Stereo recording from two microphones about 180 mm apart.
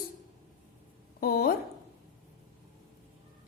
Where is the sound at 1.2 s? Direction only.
55° left (ahead or behind).